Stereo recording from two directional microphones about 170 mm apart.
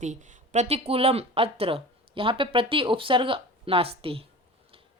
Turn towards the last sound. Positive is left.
turn(degrees=-35)  # may be behind; listen again after turning